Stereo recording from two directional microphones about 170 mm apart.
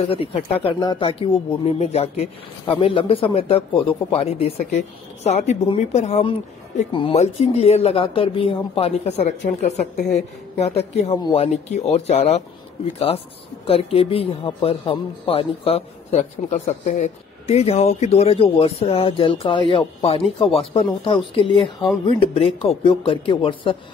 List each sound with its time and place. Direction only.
0.0 s speech: 35° left (ahead or behind)
11.1 s speech: 25° left (ahead or behind)
11.4 s speech: 40° left (ahead or behind)
13.7 s speech: 35° left (ahead or behind)